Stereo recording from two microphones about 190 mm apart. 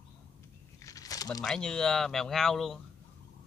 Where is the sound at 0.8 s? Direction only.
20° left (ahead or behind).